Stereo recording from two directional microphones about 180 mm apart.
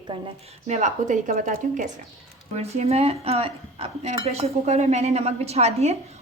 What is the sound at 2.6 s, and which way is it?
Speech, 35° right (ahead or behind).